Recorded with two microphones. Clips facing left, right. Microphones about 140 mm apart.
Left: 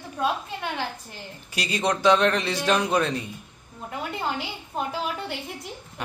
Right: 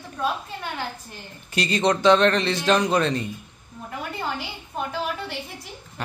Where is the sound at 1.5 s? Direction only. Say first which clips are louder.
Right 4 dB; 5° left (ahead or behind).